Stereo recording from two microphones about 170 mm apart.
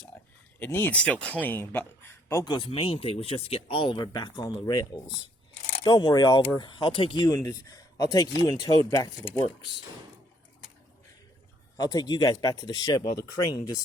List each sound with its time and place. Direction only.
0.6 s speech: 10° left (ahead or behind)
2.3 s speech: 25° left (ahead or behind)
11.8 s speech: 25° left (ahead or behind)